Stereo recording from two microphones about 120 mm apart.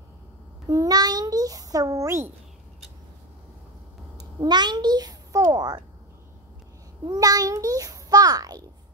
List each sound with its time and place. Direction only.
0.7 s a child's voice: 30° right (ahead or behind)
4.4 s a child's voice: 35° right (ahead or behind)
7.1 s a child's voice: 30° right (ahead or behind)